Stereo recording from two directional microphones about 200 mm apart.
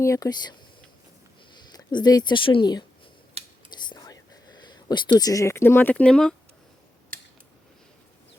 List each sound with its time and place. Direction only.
0.0 s speech: 15° left (ahead or behind)
1.5 s speech: 20° left (ahead or behind)
3.4 s whispering: 30° right (ahead or behind)
3.8 s whispering: 20° left (ahead or behind)
5.2 s speech: 15° left (ahead or behind)